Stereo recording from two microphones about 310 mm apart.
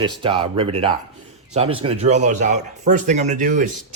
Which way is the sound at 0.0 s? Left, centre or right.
Centre.